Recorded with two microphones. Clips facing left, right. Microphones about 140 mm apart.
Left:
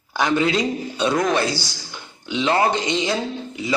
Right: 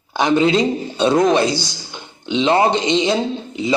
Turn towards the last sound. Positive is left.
turn(degrees=-25)  # may be behind; listen again after turning